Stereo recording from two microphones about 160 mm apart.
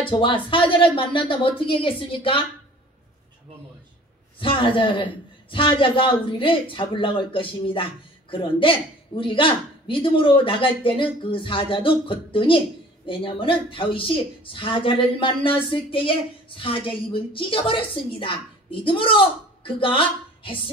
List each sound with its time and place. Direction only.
0.0 s a man's voice: 30° left (ahead or behind)
4.4 s a man's voice: 30° left (ahead or behind)